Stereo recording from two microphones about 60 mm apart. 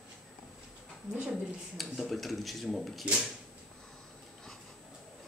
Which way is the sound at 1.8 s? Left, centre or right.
Centre.